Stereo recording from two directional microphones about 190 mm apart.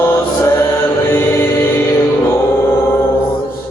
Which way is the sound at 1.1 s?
10° left (ahead or behind).